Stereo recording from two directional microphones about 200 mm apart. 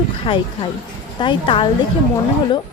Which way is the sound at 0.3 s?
25° left (ahead or behind).